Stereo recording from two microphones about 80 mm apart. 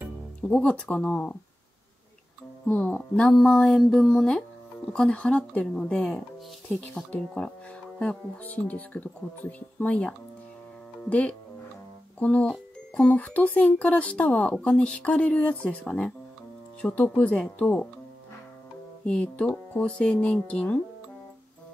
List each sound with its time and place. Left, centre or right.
0.4 s speech: centre
3.3 s speech: centre
7.2 s speech: centre
8.0 s speech: centre
19.0 s speech: centre